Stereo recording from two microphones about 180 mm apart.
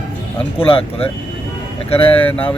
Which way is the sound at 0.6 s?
30° left (ahead or behind).